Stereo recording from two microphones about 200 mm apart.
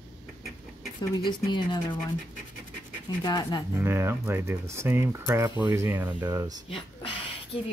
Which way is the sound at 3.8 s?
10° right (ahead or behind).